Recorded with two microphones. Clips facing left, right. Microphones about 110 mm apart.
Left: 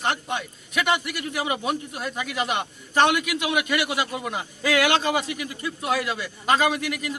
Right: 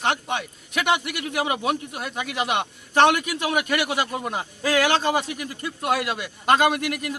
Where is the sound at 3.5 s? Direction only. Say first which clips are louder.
Right 1 dB; 50° right (ahead or behind).